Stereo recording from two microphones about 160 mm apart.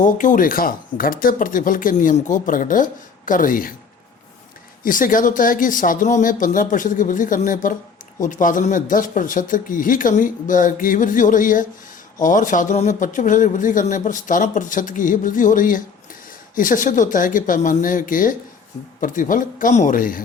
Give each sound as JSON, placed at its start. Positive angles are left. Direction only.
{"t": 0.0, "sound": "speech", "side_deg": 55}
{"t": 4.8, "sound": "speech", "side_deg": 55}